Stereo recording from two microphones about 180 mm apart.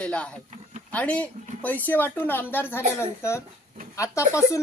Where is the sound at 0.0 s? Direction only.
5° left (ahead or behind).